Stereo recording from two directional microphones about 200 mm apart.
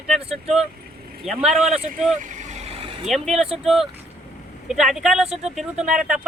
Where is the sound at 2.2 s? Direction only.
35° right (ahead or behind).